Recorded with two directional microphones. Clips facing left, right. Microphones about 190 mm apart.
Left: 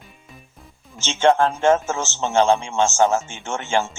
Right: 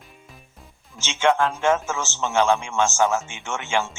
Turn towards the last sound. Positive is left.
turn(degrees=45)  # may be behind; listen again after turning